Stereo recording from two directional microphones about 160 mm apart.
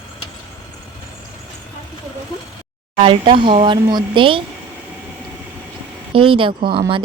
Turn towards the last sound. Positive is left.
turn(degrees=-30)  # may be behind; listen again after turning